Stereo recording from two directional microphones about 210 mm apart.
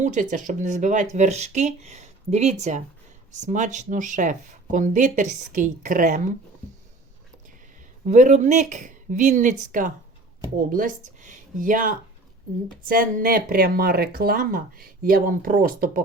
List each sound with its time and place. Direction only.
0.0 s speech: 35° right (ahead or behind)
8.0 s speech: 35° right (ahead or behind)